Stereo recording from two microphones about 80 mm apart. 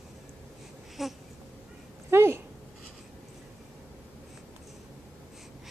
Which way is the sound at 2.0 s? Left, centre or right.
Right.